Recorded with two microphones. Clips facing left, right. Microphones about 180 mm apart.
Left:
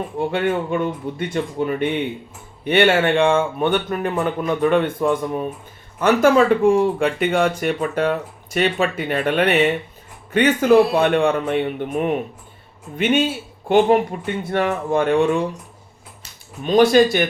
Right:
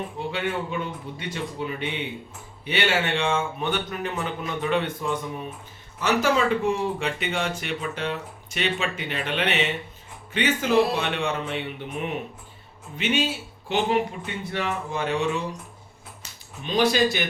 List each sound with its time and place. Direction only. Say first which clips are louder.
0.2 s speech: left 9 dB; 55° left (ahead or behind)
16.6 s speech: left 8 dB; 50° left (ahead or behind)